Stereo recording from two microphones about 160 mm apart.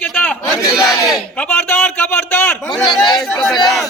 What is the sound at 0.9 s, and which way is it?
Speech, 25° left (ahead or behind).